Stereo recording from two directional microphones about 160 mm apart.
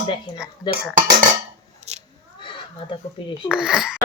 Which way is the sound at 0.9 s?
50° right (ahead or behind).